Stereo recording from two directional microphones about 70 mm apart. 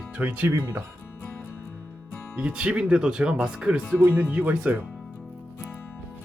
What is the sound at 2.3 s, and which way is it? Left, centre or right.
Speech, centre.